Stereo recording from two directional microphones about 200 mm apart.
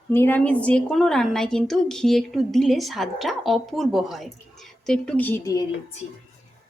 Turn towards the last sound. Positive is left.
turn(degrees=15)  # may be behind; listen again after turning